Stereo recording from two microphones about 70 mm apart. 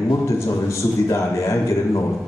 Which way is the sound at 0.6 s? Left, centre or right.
Left.